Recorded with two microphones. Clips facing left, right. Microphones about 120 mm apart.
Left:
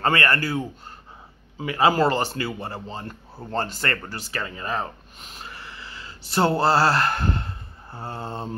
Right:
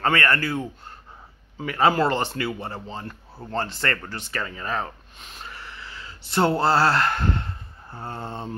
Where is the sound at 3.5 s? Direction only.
40° left (ahead or behind).